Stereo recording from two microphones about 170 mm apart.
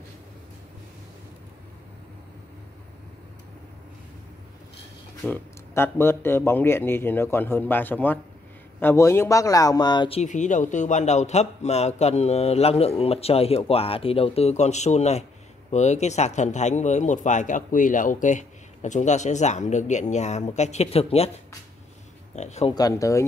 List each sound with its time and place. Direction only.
5.3 s speech: 15° left (ahead or behind); by 21.3 s 35° left (ahead or behind)
22.3 s speech: 40° left (ahead or behind)
22.8 s speech: 20° left (ahead or behind)